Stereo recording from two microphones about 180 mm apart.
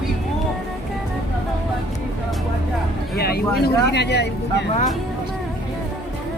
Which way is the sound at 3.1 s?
60° left (ahead or behind).